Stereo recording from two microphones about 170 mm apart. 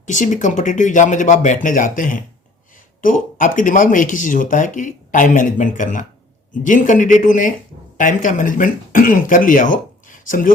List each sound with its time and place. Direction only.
0.0 s speech: 45° left (ahead or behind)